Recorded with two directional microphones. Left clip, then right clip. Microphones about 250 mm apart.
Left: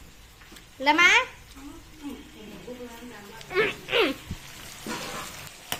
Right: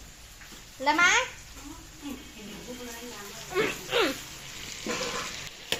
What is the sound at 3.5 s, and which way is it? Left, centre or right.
Speech, left.